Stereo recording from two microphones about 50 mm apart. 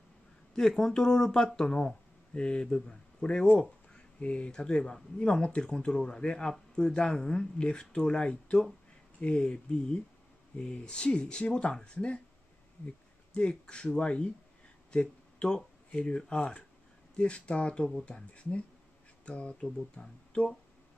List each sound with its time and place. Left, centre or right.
0.6 s speech: centre
13.3 s speech: left